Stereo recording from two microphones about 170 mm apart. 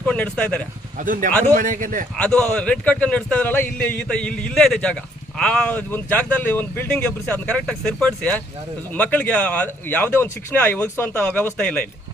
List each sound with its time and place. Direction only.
0.0 s speech: 10° left (ahead or behind)
0.9 s a man's voice: 50° right (ahead or behind)
2.1 s speech: 5° left (ahead or behind)